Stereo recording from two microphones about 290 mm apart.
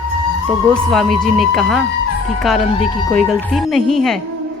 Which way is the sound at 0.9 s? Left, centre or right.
Centre.